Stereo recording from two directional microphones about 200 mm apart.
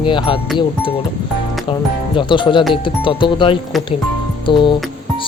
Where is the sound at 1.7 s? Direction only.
25° left (ahead or behind).